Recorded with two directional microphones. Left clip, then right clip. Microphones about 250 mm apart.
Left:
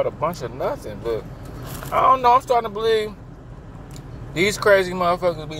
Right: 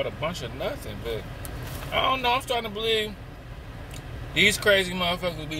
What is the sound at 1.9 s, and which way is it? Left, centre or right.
Speech, centre.